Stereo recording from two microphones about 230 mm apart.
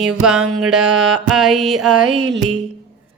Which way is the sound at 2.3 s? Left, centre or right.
Right.